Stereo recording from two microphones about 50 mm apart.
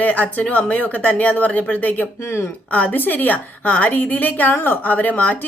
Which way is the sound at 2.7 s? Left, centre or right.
Left.